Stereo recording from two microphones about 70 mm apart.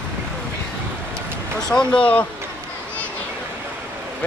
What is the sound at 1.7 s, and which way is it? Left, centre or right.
Speech, centre.